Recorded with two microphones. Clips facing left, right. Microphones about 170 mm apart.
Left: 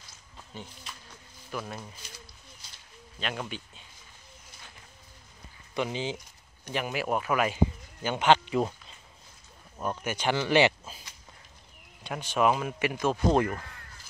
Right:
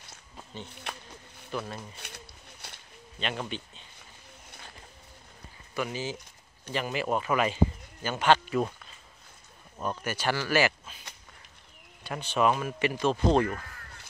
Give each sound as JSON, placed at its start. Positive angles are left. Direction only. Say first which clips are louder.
{"t": 0.7, "sound": "a sound", "louder": "right 6 dB", "side_deg": -65}
{"t": 1.6, "sound": "speech", "louder": "left 2 dB", "side_deg": 0}
{"t": 2.0, "sound": "a sound", "louder": "right 3 dB", "side_deg": -65}
{"t": 3.2, "sound": "speech", "louder": "right 1 dB", "side_deg": 5}
{"t": 5.8, "sound": "speech", "louder": "left 2 dB", "side_deg": 20}
{"t": 9.8, "sound": "speech", "louder": "left 1 dB", "side_deg": 10}
{"t": 12.1, "sound": "speech", "louder": "even", "side_deg": 10}